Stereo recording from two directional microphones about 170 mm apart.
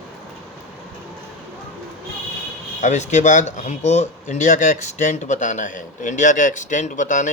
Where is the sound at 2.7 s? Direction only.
45° left (ahead or behind).